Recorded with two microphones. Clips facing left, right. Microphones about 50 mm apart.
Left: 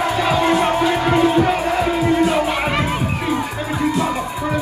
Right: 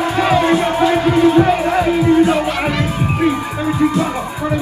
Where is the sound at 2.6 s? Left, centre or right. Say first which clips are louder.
Right 1 dB; left.